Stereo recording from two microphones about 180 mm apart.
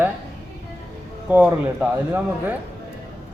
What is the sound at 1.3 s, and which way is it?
Speech, 10° right (ahead or behind).